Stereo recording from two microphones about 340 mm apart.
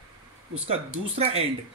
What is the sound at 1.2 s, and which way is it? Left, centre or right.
Speech, centre.